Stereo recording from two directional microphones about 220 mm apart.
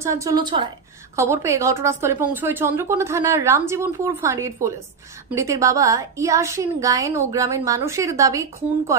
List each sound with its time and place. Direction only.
0.0 s a woman's voice: 15° right (ahead or behind)